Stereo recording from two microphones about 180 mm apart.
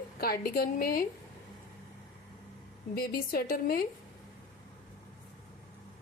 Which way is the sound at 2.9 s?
55° left (ahead or behind).